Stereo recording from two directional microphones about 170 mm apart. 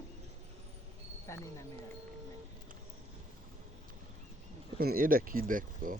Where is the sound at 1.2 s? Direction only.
15° left (ahead or behind).